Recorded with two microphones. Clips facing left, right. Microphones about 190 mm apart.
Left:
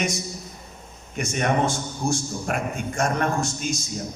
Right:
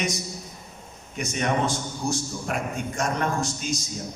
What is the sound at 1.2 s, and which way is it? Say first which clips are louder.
A man's voice: left 2 dB; 50° left (ahead or behind).